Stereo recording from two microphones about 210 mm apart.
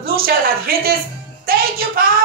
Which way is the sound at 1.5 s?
45° right (ahead or behind).